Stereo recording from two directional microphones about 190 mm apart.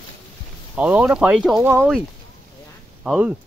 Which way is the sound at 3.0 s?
5° right (ahead or behind).